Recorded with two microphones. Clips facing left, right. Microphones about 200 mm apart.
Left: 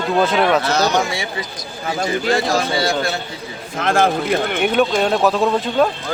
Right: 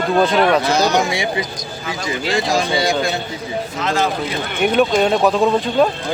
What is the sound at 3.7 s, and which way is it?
Speech, 50° left (ahead or behind).